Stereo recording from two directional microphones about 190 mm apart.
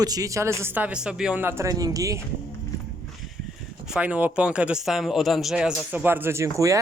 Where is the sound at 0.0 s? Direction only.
20° right (ahead or behind).